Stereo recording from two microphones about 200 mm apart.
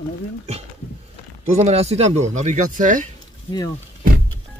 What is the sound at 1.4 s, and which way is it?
Speech, 35° right (ahead or behind).